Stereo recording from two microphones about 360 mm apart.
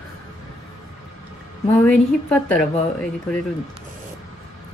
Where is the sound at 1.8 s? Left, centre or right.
Centre.